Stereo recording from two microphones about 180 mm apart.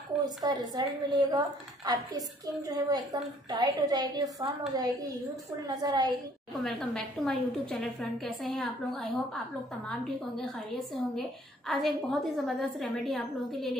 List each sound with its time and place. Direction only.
0.2 s a woman's voice: 20° right (ahead or behind)
6.6 s a woman's voice: centre (ahead or behind)
11.1 s a woman's voice: centre (ahead or behind)